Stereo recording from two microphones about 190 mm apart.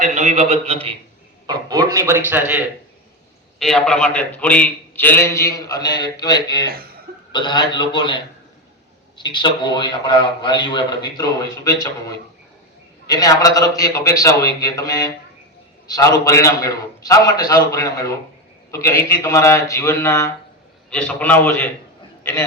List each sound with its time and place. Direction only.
0.0 s a man's voice: 35° right (ahead or behind)
1.5 s speech: 20° right (ahead or behind)
3.6 s a man's voice: centre (ahead or behind)